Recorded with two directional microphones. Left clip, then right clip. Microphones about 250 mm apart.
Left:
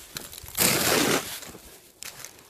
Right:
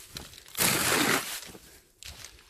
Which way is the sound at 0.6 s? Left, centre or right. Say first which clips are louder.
Left 3 dB; centre.